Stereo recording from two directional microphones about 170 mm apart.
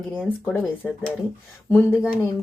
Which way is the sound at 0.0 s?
5° left (ahead or behind).